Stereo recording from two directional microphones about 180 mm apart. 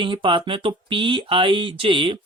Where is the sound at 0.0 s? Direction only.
30° right (ahead or behind).